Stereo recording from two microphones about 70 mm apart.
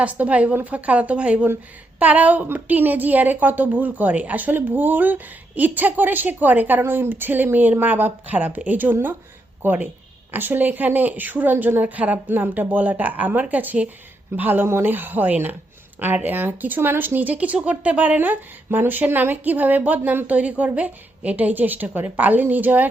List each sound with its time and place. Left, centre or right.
0.0 s a woman's voice: right